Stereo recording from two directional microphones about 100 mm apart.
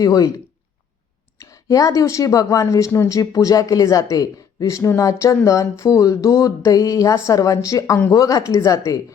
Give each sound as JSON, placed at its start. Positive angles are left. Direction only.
{"t": 0.0, "sound": "speech", "side_deg": 40}
{"t": 1.4, "sound": "speech", "side_deg": 35}